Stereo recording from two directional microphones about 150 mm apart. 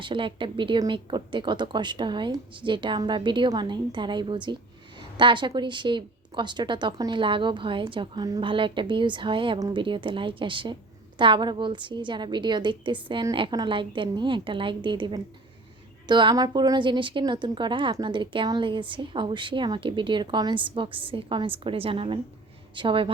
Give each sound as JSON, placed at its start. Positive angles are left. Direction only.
{"t": 0.0, "sound": "speech", "side_deg": -35}